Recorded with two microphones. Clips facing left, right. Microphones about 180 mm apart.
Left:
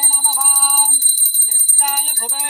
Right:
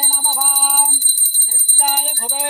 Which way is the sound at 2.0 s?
30° right (ahead or behind).